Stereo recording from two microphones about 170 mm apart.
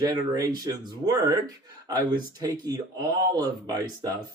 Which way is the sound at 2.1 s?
25° right (ahead or behind).